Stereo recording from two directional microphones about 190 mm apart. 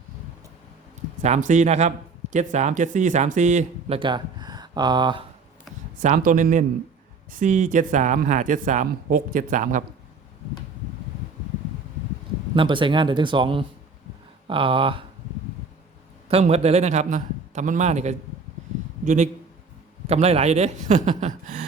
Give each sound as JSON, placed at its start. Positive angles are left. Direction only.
{"t": 1.2, "sound": "speech", "side_deg": -40}
{"t": 6.0, "sound": "speech", "side_deg": -40}
{"t": 12.5, "sound": "speech", "side_deg": -25}
{"t": 16.3, "sound": "speech", "side_deg": -35}